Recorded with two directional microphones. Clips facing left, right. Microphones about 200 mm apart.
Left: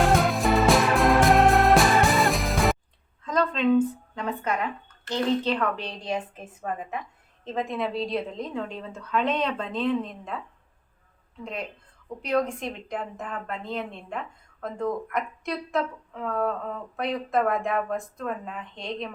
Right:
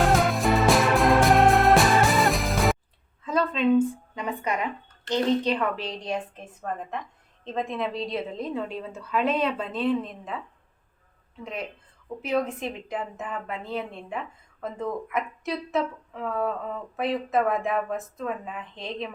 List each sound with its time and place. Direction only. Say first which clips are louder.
0.0 s music: even; centre (ahead or behind)
3.2 s a sound: even; 5° right (ahead or behind)
5.0 s speech: right 1 dB; 15° right (ahead or behind)
12.0 s speech: left 1 dB; 5° right (ahead or behind)